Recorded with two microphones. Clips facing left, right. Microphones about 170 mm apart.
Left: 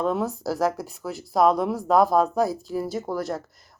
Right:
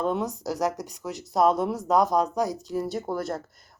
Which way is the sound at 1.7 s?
20° right (ahead or behind).